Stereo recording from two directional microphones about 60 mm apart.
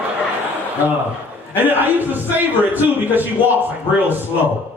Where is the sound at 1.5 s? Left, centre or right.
Right.